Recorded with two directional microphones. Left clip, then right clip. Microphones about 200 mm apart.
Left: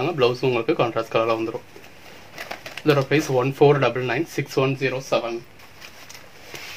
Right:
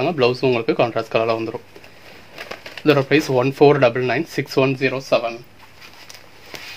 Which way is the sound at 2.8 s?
40° right (ahead or behind).